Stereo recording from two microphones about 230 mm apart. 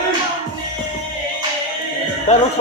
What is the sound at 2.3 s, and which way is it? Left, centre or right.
Speech, left.